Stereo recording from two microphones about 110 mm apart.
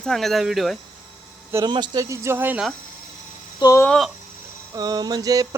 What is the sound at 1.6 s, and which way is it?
Speech, 40° right (ahead or behind).